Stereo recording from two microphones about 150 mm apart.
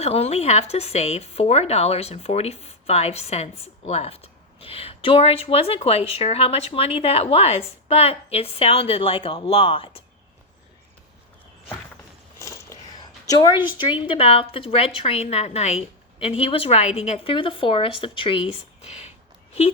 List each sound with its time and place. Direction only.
0.0 s speech: 45° left (ahead or behind)
12.4 s zipper: 20° left (ahead or behind)
13.7 s speech: 30° left (ahead or behind)